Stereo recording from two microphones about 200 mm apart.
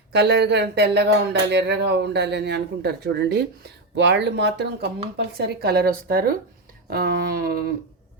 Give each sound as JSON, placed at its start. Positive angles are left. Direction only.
{"t": 0.1, "sound": "speech", "side_deg": -55}